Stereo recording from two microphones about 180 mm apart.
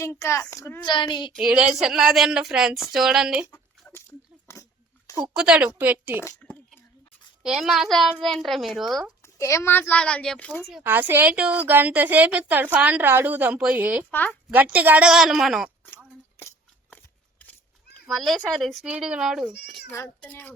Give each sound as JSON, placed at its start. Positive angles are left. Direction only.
{"t": 0.0, "sound": "a woman's voice", "side_deg": 15}
{"t": 0.9, "sound": "speech", "side_deg": 25}
{"t": 1.3, "sound": "speech", "side_deg": -5}
{"t": 3.5, "sound": "a sound", "side_deg": 10}
{"t": 4.5, "sound": "dog", "side_deg": 15}
{"t": 5.3, "sound": "a woman's voice", "side_deg": -5}
{"t": 6.1, "sound": "a sound", "side_deg": 10}
{"t": 7.4, "sound": "speech", "side_deg": 0}
{"t": 9.2, "sound": "a woman's voice", "side_deg": 15}
{"t": 10.7, "sound": "a woman's voice", "side_deg": -5}
{"t": 14.1, "sound": "a woman's voice", "side_deg": 10}
{"t": 14.5, "sound": "speech", "side_deg": -10}
{"t": 18.1, "sound": "speech", "side_deg": 0}
{"t": 19.9, "sound": "a woman's voice", "side_deg": 15}